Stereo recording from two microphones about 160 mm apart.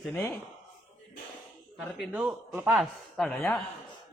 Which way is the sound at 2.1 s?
Centre (ahead or behind).